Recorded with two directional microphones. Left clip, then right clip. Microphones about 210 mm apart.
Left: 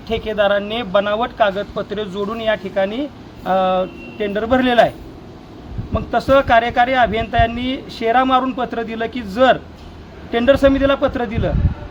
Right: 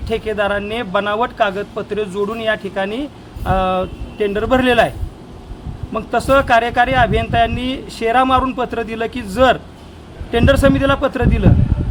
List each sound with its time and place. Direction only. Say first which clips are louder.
0.1 s speech: left 1 dB; 5° right (ahead or behind)
5.9 s speech: even; 5° right (ahead or behind)